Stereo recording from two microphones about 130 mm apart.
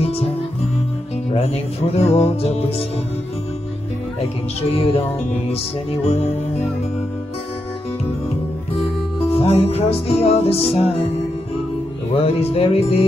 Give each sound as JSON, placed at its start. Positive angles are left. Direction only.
{"t": 0.0, "sound": "music", "side_deg": 50}
{"t": 1.3, "sound": "speech", "side_deg": 50}
{"t": 4.7, "sound": "speech", "side_deg": 50}
{"t": 9.3, "sound": "speech", "side_deg": 50}
{"t": 12.1, "sound": "speech", "side_deg": 50}